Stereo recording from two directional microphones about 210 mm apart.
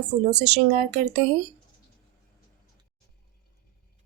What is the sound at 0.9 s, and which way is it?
Speech, 30° right (ahead or behind).